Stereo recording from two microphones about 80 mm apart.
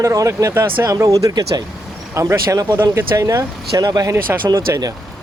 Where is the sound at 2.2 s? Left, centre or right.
Right.